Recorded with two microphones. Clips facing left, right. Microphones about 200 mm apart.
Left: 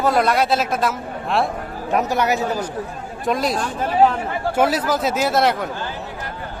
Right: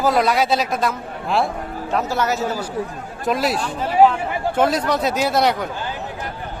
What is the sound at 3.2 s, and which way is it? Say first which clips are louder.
Speech: even; 5° right (ahead or behind).